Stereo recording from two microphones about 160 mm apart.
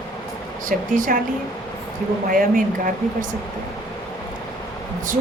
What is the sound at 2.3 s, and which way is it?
Speech, 60° right (ahead or behind).